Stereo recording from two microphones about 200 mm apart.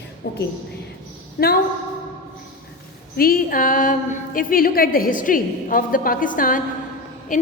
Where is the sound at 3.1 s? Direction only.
45° left (ahead or behind).